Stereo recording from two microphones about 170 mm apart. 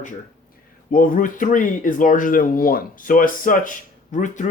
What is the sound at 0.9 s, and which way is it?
Speech, 55° left (ahead or behind).